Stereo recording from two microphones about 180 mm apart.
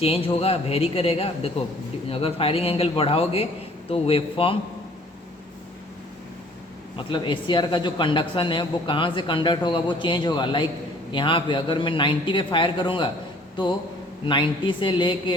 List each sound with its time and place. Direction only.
0.0 s a man's voice: 30° left (ahead or behind)
6.9 s speech: 25° left (ahead or behind)
14.3 s speech: 25° left (ahead or behind)